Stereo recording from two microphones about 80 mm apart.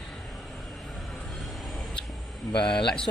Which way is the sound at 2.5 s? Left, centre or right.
Centre.